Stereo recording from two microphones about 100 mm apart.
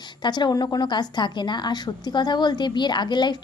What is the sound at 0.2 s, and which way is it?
A woman's voice, 45° left (ahead or behind).